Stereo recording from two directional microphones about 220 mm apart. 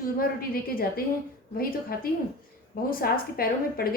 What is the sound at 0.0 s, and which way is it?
A woman's voice, 40° left (ahead or behind).